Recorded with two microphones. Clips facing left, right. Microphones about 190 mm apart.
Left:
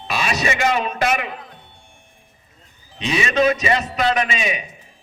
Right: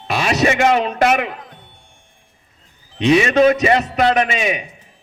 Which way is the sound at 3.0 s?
60° right (ahead or behind).